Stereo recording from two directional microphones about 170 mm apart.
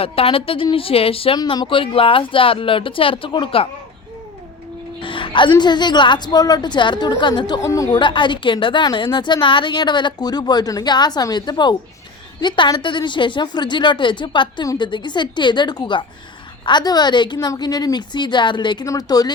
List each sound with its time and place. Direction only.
0.0 s speech: 35° left (ahead or behind)
5.0 s a woman's voice: 30° left (ahead or behind)